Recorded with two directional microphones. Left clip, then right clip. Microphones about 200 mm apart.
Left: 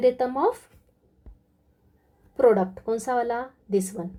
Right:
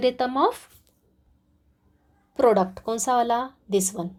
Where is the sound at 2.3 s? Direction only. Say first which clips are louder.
Even; 30° right (ahead or behind).